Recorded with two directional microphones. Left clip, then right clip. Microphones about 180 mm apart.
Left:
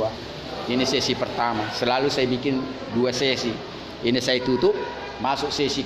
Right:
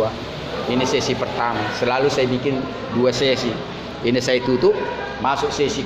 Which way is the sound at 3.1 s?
30° left (ahead or behind).